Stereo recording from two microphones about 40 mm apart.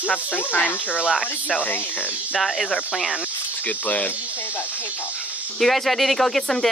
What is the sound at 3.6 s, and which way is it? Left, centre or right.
Speech, left.